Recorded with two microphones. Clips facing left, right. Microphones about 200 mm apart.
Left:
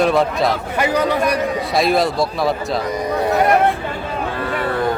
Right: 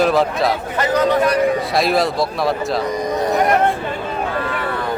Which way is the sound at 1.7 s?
Centre (ahead or behind).